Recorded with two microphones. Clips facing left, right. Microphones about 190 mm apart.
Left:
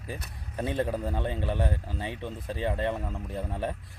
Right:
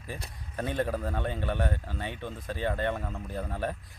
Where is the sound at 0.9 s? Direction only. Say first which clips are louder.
Left 1 dB; centre (ahead or behind).